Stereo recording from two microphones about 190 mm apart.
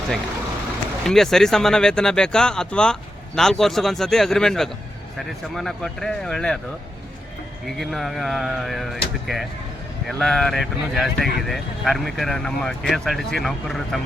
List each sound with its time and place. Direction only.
1.0 s speech: centre (ahead or behind)
7.8 s speech: centre (ahead or behind)